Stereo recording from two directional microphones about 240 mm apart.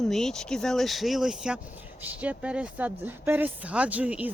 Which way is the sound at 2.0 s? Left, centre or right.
Centre.